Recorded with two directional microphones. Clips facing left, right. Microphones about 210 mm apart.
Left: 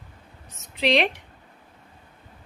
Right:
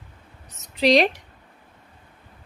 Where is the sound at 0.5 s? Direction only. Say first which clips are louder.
Right 4 dB; 40° right (ahead or behind).